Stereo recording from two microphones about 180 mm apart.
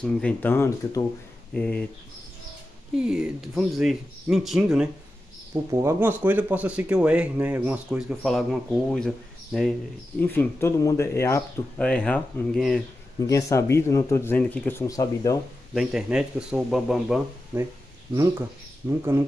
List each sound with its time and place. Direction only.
0.0 s speech: 5° left (ahead or behind)
1.5 s speech: 5° left (ahead or behind)
3.0 s speech: 5° right (ahead or behind)
5.5 s speech: 15° right (ahead or behind); by 9.8 s centre (ahead or behind)
10.2 s speech: 10° left (ahead or behind)
13.3 s speech: 15° left (ahead or behind)
15.7 s speech: 5° right (ahead or behind)
18.1 s speech: 15° right (ahead or behind)